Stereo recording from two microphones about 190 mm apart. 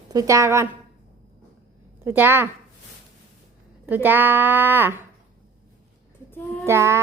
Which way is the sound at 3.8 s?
10° right (ahead or behind).